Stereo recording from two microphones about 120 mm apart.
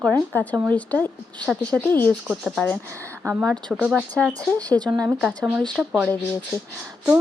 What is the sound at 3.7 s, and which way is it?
Speech, 10° right (ahead or behind).